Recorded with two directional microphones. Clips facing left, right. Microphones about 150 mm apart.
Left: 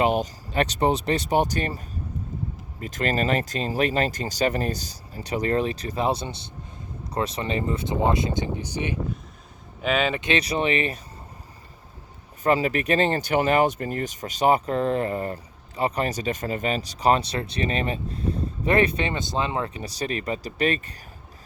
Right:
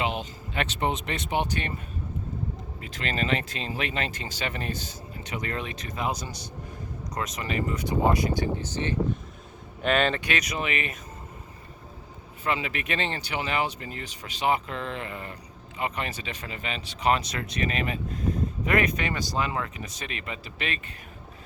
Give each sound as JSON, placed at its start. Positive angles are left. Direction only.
{"t": 0.0, "sound": "speech", "side_deg": 45}
{"t": 2.8, "sound": "speech", "side_deg": 45}
{"t": 10.2, "sound": "speech", "side_deg": 25}
{"t": 12.4, "sound": "speech", "side_deg": 40}